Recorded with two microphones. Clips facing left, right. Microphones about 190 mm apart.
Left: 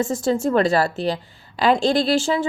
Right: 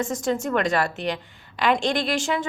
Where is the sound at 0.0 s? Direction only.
35° left (ahead or behind).